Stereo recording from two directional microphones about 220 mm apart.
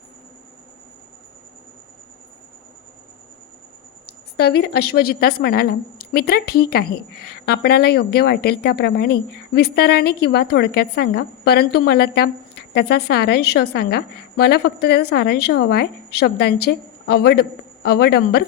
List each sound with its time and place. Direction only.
4.4 s a woman's voice: 45° left (ahead or behind)